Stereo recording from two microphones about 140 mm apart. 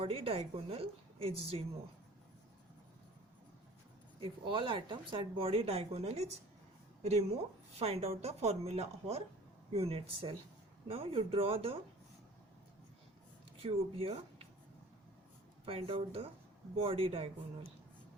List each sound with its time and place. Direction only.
0.0 s speech: 45° right (ahead or behind)
4.2 s speech: 35° right (ahead or behind)
13.6 s speech: 45° right (ahead or behind)
15.6 s speech: 45° right (ahead or behind)